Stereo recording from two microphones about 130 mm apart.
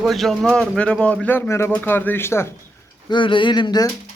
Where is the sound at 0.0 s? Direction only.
Centre (ahead or behind); by 2.5 s 20° left (ahead or behind).